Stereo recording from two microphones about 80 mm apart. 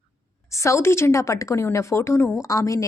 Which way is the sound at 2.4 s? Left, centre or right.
Left.